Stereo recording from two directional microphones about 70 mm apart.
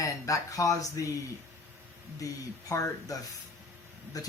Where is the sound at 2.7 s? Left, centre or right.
Left.